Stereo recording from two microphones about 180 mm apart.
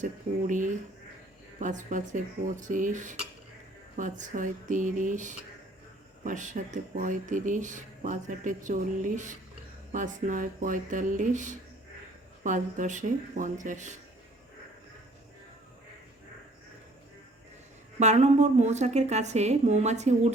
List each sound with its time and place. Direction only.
0.0 s speech: 45° right (ahead or behind)
18.0 s a woman's voice: 40° right (ahead or behind)